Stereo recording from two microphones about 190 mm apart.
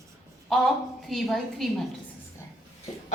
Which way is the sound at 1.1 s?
Centre (ahead or behind).